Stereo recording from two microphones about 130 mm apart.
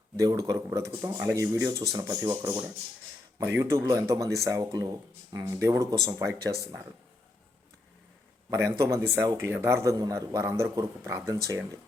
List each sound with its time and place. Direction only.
0.2 s speech: 25° right (ahead or behind)
8.4 s a man's voice: 25° right (ahead or behind)